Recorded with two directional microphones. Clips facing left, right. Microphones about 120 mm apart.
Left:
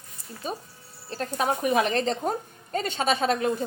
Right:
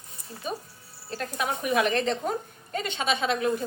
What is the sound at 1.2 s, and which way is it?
A woman's voice, 35° left (ahead or behind).